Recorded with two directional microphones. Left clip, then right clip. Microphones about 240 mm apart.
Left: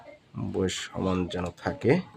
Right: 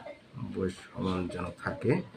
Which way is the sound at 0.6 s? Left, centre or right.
Left.